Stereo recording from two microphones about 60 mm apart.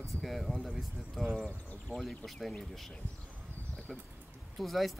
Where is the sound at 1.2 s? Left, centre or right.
Centre.